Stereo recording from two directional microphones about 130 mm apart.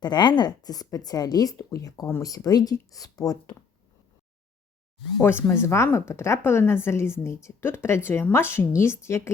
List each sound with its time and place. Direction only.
0.0 s speech: 35° left (ahead or behind)
5.2 s speech: 20° left (ahead or behind)